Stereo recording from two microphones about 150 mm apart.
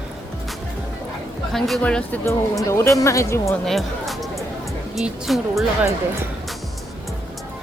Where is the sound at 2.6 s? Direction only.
20° left (ahead or behind).